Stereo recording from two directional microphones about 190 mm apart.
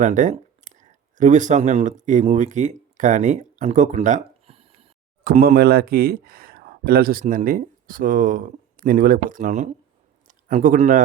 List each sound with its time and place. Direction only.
0.0 s speech: 40° right (ahead or behind)
5.2 s a man's voice: 50° right (ahead or behind)